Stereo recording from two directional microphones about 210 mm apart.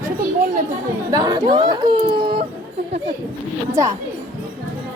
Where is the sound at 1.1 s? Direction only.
20° right (ahead or behind).